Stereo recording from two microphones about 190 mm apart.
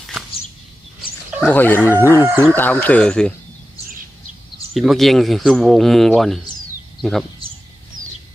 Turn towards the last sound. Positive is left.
turn(degrees=0)  # may be behind; listen again after turning